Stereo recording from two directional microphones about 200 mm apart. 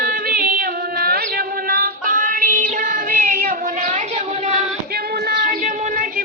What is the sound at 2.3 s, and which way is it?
Music, 45° right (ahead or behind).